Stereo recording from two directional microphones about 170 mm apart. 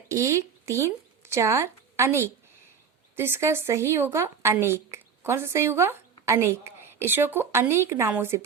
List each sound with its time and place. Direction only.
0.1 s a woman's voice: 15° right (ahead or behind)